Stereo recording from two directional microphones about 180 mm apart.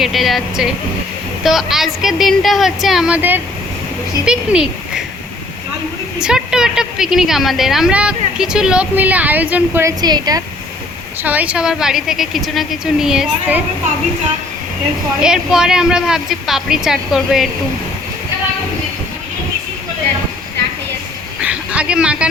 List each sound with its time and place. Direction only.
0.0 s a woman's voice: centre (ahead or behind)
6.1 s a woman's voice: 5° right (ahead or behind)
10.0 s a woman's voice: 20° right (ahead or behind)
11.2 s a woman's voice: 10° right (ahead or behind)
15.2 s a woman's voice: 5° right (ahead or behind)
21.4 s a sound: 5° right (ahead or behind)